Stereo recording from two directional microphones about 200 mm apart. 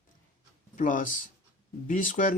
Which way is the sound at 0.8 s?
40° left (ahead or behind).